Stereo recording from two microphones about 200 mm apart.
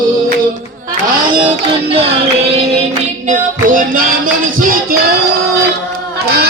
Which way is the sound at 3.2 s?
45° right (ahead or behind).